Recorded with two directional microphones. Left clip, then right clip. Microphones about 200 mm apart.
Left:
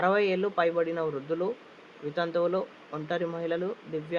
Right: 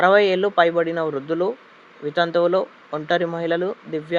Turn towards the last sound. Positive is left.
turn(degrees=-30)  # may be behind; listen again after turning